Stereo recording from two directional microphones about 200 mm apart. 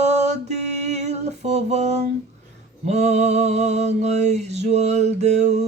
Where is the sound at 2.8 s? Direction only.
35° right (ahead or behind).